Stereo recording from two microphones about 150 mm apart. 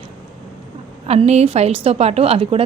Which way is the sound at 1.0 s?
45° right (ahead or behind).